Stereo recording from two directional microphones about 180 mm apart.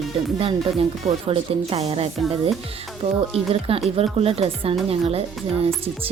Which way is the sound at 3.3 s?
30° right (ahead or behind).